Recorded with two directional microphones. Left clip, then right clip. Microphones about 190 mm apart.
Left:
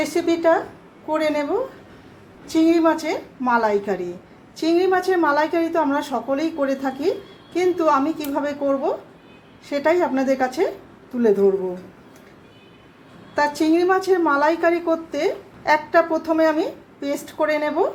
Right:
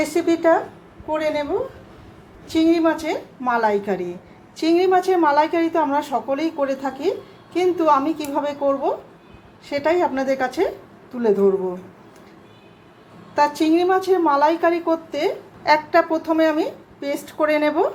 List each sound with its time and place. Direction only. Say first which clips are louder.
0.0 s a woman's voice: right 1 dB; centre (ahead or behind)
1.1 s speech: left 1 dB; 15° left (ahead or behind)
2.5 s a woman's voice: left 1 dB; 10° left (ahead or behind)
13.3 s a woman's voice: right 1 dB; centre (ahead or behind)